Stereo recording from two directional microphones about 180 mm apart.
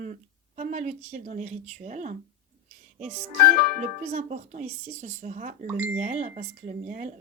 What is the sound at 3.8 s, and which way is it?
Speech, 40° right (ahead or behind).